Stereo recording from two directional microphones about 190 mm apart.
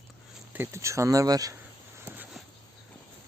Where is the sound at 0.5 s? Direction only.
15° right (ahead or behind).